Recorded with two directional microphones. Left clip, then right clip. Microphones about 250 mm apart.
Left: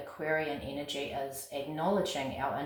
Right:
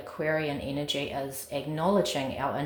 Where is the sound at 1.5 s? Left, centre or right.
Right.